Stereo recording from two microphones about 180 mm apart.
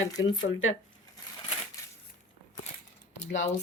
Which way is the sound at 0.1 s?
20° left (ahead or behind).